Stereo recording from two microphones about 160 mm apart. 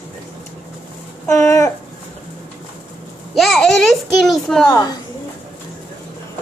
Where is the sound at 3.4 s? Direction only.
Centre (ahead or behind).